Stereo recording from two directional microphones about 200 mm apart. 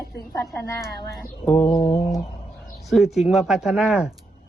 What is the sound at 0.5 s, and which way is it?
A man's voice, 15° left (ahead or behind).